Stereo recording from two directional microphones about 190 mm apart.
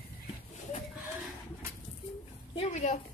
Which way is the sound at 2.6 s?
35° left (ahead or behind).